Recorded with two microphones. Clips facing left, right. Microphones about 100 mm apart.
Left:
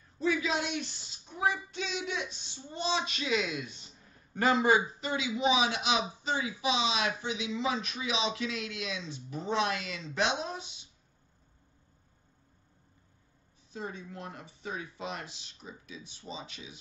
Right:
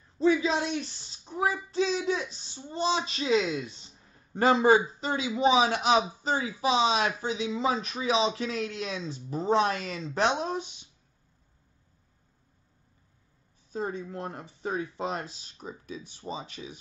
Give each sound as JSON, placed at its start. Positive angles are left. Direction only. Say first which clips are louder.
{"t": 0.2, "sound": "a child's voice", "louder": "right 6 dB", "side_deg": -30}
{"t": 13.7, "sound": "speech", "louder": "right 7 dB", "side_deg": -45}